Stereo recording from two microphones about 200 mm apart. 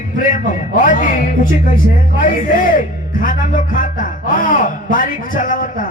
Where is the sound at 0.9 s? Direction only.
40° left (ahead or behind).